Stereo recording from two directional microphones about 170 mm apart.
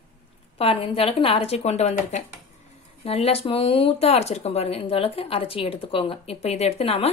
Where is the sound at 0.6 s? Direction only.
35° left (ahead or behind).